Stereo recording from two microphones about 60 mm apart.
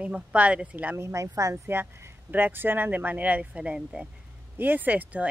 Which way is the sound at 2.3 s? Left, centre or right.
Right.